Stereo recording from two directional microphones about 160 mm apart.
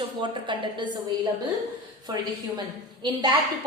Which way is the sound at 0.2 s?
30° right (ahead or behind).